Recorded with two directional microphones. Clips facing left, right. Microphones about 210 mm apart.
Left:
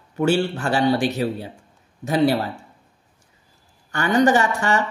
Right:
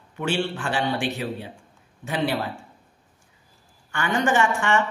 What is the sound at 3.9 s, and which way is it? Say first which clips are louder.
Speech: left 6 dB; 40° left (ahead or behind).